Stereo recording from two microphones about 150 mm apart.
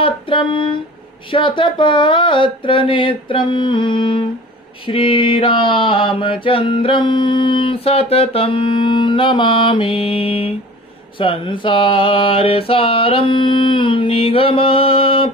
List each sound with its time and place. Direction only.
0.0 s mantra: 35° left (ahead or behind)